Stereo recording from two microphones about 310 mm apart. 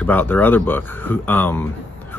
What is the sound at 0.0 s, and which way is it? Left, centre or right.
Speech, centre.